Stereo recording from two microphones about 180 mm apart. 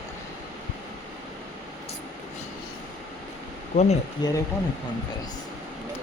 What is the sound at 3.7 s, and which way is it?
Speech, 45° left (ahead or behind).